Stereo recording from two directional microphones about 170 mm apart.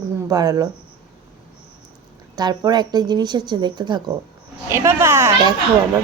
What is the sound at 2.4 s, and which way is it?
A woman's voice, 25° right (ahead or behind).